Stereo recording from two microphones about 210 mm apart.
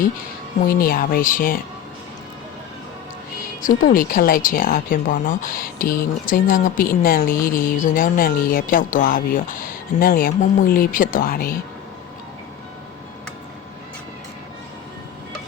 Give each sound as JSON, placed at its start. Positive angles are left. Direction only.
{"t": 0.7, "sound": "speech", "side_deg": 45}
{"t": 3.6, "sound": "speech", "side_deg": 40}